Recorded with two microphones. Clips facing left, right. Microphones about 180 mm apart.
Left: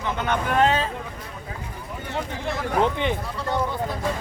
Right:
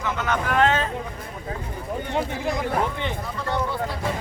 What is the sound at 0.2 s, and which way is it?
Speech, 30° left (ahead or behind).